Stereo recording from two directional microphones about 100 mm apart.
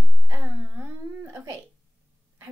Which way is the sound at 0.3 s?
25° right (ahead or behind).